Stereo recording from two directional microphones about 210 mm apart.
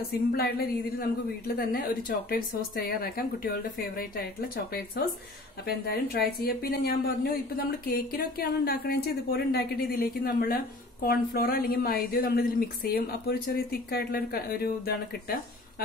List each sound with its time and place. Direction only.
0.4 s a woman's voice: 45° left (ahead or behind)